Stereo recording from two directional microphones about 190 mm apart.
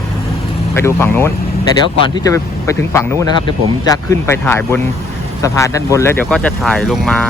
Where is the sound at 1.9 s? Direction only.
25° left (ahead or behind).